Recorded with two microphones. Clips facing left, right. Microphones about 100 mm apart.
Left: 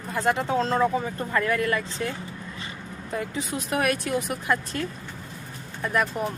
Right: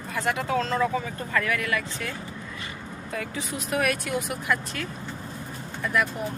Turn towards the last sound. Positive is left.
turn(degrees=35)  # may be behind; listen again after turning